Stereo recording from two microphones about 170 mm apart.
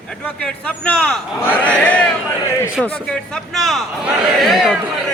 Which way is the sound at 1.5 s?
10° left (ahead or behind).